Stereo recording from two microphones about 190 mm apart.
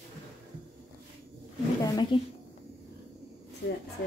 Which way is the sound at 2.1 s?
25° left (ahead or behind).